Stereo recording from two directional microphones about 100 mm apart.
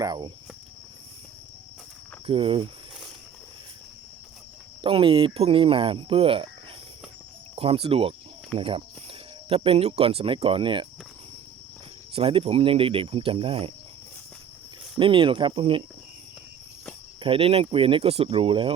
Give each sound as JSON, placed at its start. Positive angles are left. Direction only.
{"t": 0.0, "sound": "cricket", "side_deg": -40}
{"t": 2.2, "sound": "speech", "side_deg": -65}
{"t": 4.8, "sound": "speech", "side_deg": -60}
{"t": 7.5, "sound": "speech", "side_deg": -75}
{"t": 8.5, "sound": "speech", "side_deg": -60}
{"t": 12.1, "sound": "speech", "side_deg": -70}
{"t": 14.9, "sound": "speech", "side_deg": -60}
{"t": 17.2, "sound": "speech", "side_deg": -65}